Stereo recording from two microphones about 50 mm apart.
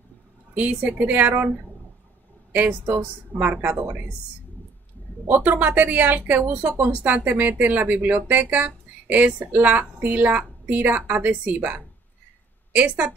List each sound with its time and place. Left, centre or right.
0.8 s speech: right
2.5 s speech: right
5.3 s speech: right